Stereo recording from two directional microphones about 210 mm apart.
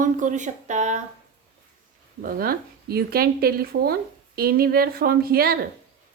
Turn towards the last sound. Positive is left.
turn(degrees=-45)  # may be behind; listen again after turning